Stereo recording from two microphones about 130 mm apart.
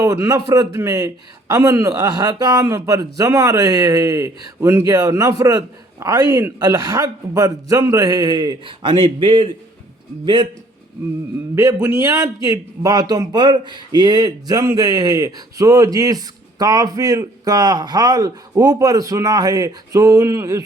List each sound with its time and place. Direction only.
0.0 s a man's voice: 25° right (ahead or behind)
11.5 s a man's voice: 25° right (ahead or behind)